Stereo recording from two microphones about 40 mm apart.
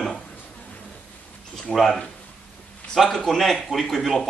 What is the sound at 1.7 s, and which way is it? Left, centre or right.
Speech, centre.